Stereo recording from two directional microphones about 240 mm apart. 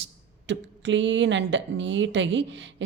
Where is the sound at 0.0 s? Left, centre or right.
Right.